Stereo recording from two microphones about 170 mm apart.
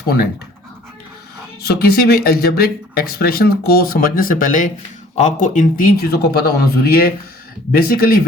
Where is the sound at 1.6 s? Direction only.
70° left (ahead or behind).